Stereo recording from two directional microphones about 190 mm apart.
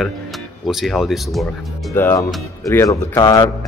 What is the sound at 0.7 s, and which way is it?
Speech, centre (ahead or behind).